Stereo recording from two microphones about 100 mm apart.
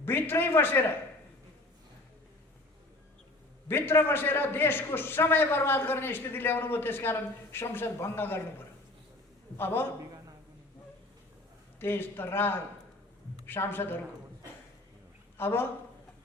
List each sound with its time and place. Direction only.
0.0 s a man's voice: 20° left (ahead or behind)
3.7 s a man's voice: 20° left (ahead or behind)
9.6 s a man's voice: 20° left (ahead or behind)
11.8 s a man's voice: 20° left (ahead or behind)
15.4 s a man's voice: 20° left (ahead or behind)